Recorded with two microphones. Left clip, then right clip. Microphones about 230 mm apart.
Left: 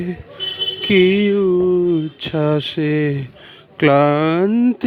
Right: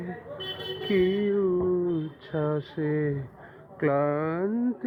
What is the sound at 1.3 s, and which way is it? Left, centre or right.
Speech, left.